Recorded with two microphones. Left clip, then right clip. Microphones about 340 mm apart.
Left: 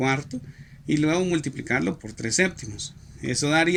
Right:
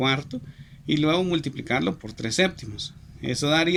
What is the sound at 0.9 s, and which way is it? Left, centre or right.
Speech, right.